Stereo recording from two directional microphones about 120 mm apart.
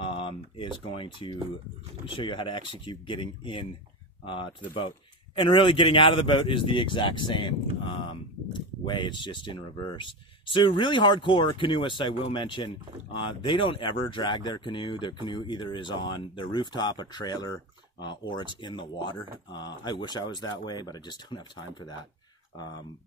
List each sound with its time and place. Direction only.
0.0 s a sound: 45° left (ahead or behind)
2.0 s a man's voice: 45° left (ahead or behind)
4.7 s a man's voice: 45° left (ahead or behind)